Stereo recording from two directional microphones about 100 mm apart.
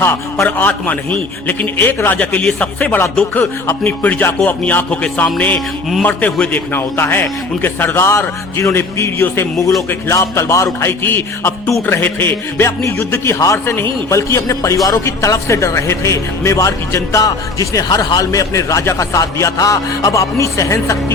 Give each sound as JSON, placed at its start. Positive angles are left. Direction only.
{"t": 0.4, "sound": "a man's voice", "side_deg": 15}
{"t": 6.7, "sound": "a man's voice", "side_deg": 20}